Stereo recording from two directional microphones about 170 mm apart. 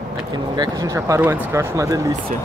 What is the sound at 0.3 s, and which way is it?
Speech, 25° right (ahead or behind).